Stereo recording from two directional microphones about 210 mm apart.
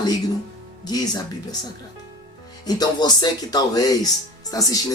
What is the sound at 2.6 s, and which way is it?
Speech, 20° left (ahead or behind).